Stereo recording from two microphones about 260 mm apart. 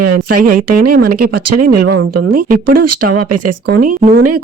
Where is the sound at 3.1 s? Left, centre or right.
Right.